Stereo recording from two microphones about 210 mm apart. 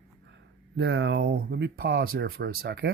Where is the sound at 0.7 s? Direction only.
55° right (ahead or behind).